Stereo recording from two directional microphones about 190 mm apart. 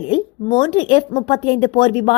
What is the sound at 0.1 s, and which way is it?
A woman's voice, 25° left (ahead or behind).